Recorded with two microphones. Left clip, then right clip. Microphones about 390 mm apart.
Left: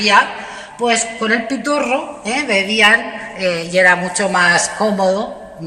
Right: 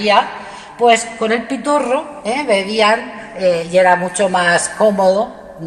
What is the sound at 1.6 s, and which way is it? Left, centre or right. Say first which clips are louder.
A woman's voice: right 2 dB; centre.